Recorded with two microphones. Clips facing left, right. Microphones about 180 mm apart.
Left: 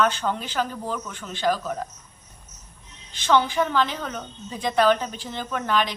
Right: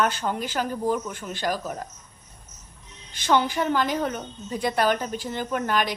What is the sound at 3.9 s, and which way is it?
Speech, 45° right (ahead or behind).